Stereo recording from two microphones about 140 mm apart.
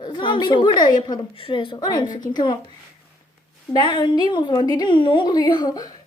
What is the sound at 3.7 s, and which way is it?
A woman's voice, 35° left (ahead or behind).